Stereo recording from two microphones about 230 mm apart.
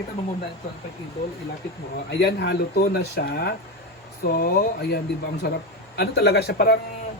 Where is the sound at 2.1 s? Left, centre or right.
Left.